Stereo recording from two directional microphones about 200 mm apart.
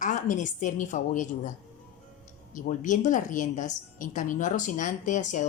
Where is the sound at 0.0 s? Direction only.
40° left (ahead or behind).